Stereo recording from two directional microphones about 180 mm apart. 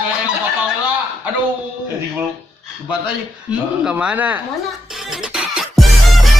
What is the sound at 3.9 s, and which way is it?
Speech, 5° right (ahead or behind).